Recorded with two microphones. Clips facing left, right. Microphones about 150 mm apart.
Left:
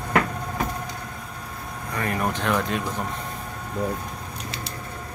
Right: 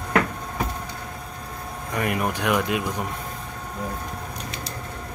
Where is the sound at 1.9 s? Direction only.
15° right (ahead or behind).